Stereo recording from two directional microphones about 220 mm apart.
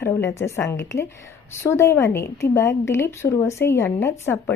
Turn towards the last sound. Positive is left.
turn(degrees=10)  # may be behind; listen again after turning